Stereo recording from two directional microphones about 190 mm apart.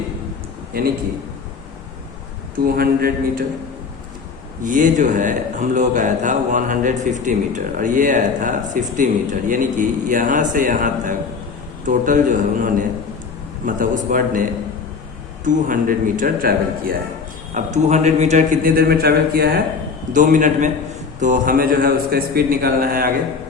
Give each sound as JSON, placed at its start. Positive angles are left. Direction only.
{"t": 0.7, "sound": "speech", "side_deg": -50}
{"t": 2.6, "sound": "speech", "side_deg": -50}
{"t": 4.6, "sound": "speech", "side_deg": -45}
{"t": 15.4, "sound": "speech", "side_deg": -45}
{"t": 17.5, "sound": "speech", "side_deg": -40}
{"t": 20.1, "sound": "speech", "side_deg": -45}